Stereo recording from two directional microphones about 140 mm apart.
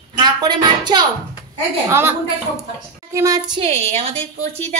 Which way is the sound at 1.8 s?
15° right (ahead or behind).